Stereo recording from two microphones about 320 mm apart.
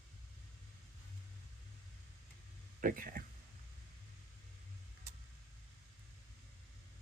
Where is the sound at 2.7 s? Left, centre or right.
Right.